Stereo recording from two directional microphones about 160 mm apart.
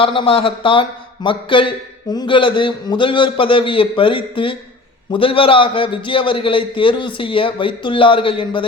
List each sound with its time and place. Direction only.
0.0 s speech: 35° left (ahead or behind)